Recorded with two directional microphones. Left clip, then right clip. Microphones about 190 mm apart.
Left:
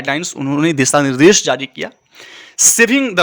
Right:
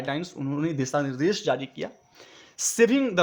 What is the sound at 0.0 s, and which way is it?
Speech, 25° left (ahead or behind).